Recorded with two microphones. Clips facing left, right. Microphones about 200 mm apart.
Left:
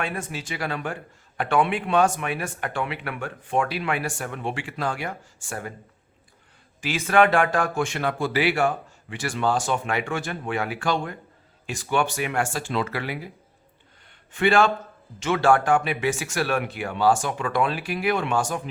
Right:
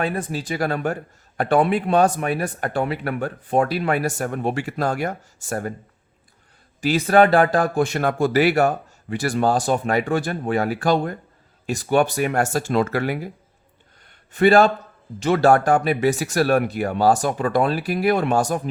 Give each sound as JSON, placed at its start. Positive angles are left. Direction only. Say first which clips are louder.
{"t": 0.0, "sound": "speech", "louder": "right 6 dB", "side_deg": -35}
{"t": 6.8, "sound": "speech", "louder": "right 4 dB", "side_deg": -35}
{"t": 14.3, "sound": "speech", "louder": "right 5 dB", "side_deg": -40}